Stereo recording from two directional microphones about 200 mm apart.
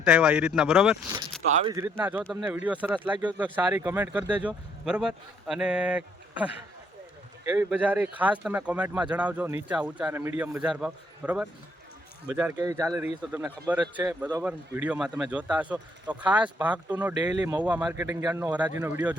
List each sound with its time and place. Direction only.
0.0 s speech: 5° right (ahead or behind)
1.5 s speech: 35° right (ahead or behind)
1.7 s speech: 10° right (ahead or behind)
17.2 s speech: 20° right (ahead or behind)